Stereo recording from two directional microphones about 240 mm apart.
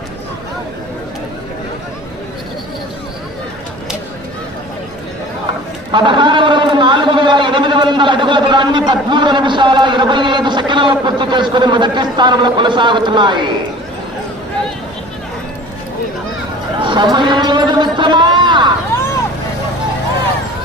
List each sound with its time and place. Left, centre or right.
5.9 s a man's voice: centre
16.8 s a man's voice: centre